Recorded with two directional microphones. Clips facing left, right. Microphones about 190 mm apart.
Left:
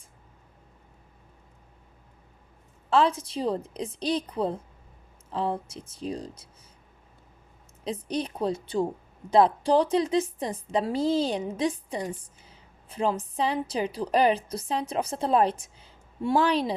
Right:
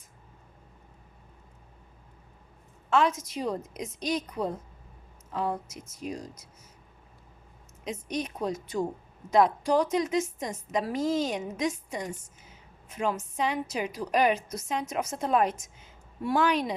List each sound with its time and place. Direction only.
2.9 s a woman's voice: 30° left (ahead or behind)
7.9 s a woman's voice: 30° left (ahead or behind)